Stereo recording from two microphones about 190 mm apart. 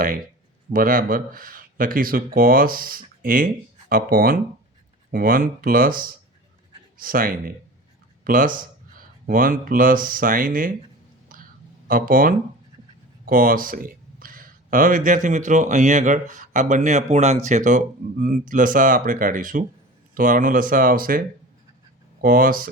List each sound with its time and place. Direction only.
0.7 s speech: 50° right (ahead or behind)
11.3 s whispering: 45° right (ahead or behind)
11.9 s speech: 50° right (ahead or behind)